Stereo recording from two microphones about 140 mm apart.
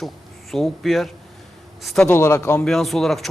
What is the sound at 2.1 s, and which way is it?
Speech, 20° left (ahead or behind).